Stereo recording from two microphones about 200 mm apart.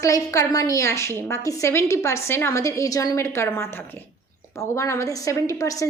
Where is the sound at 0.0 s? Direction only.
15° left (ahead or behind).